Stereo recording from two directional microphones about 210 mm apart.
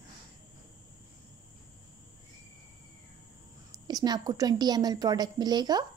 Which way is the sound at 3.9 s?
20° right (ahead or behind).